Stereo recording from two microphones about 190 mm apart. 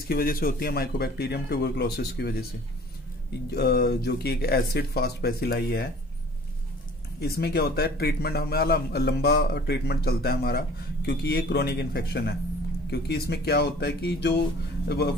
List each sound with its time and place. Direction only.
0.1 s a man's voice: 50° left (ahead or behind)
3.5 s a man's voice: 60° left (ahead or behind)
7.2 s a man's voice: 55° left (ahead or behind)